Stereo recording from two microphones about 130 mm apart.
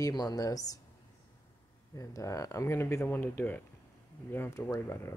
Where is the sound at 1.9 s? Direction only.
25° left (ahead or behind).